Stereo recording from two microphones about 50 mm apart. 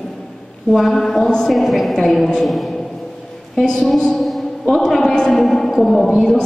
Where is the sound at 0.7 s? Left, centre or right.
Centre.